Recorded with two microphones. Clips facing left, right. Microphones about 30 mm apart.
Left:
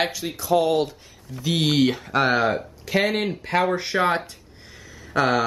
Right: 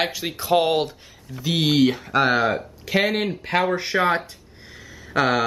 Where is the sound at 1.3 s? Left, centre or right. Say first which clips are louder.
Right 1 dB; centre.